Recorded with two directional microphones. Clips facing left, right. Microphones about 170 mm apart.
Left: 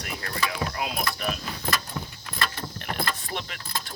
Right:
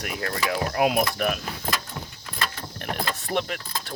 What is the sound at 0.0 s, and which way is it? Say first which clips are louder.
Speech: right 3 dB; 55° right (ahead or behind).